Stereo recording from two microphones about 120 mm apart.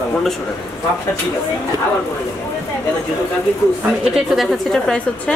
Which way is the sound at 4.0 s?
Centre (ahead or behind).